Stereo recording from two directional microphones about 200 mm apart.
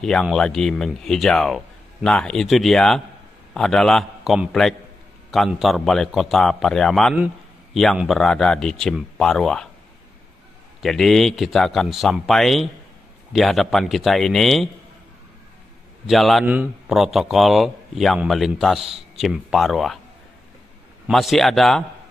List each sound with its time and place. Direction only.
0.0 s speech: 5° left (ahead or behind)
10.8 s speech: centre (ahead or behind)
16.1 s speech: centre (ahead or behind)
21.1 s speech: centre (ahead or behind)